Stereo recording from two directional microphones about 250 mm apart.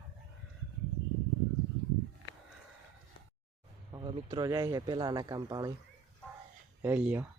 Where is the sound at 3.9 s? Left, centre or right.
Centre.